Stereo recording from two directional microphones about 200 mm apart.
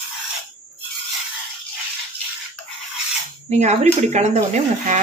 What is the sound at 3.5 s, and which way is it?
Speech, 35° right (ahead or behind).